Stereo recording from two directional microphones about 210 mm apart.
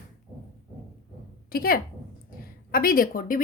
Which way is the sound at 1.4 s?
45° left (ahead or behind).